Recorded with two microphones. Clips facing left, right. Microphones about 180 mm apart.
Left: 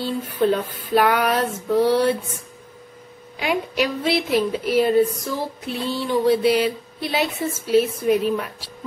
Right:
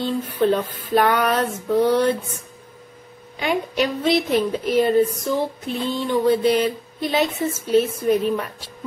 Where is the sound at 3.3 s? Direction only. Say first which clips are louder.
Right 1 dB; 5° left (ahead or behind).